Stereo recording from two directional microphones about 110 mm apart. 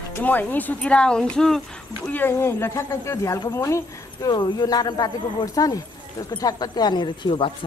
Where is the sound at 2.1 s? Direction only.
20° left (ahead or behind); by 7.5 s 50° left (ahead or behind).